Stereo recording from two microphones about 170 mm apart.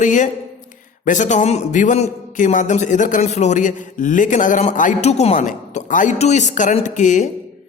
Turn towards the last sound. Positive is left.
turn(degrees=45)  # may be behind; listen again after turning